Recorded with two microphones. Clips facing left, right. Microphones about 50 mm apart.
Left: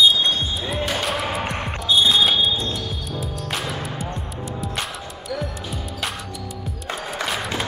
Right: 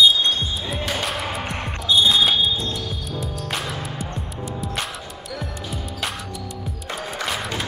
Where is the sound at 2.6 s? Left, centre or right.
Centre.